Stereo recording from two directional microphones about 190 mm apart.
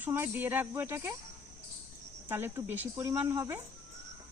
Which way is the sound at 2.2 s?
10° right (ahead or behind).